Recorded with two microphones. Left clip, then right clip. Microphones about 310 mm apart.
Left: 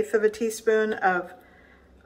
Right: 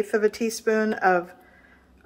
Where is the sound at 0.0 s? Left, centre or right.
Right.